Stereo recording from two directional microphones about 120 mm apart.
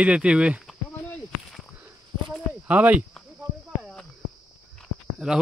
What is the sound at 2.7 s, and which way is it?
Speech, 15° right (ahead or behind).